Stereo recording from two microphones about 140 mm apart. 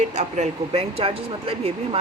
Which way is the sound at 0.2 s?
50° right (ahead or behind).